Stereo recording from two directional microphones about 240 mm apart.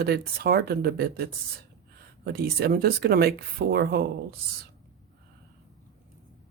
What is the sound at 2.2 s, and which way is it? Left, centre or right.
Speech, right.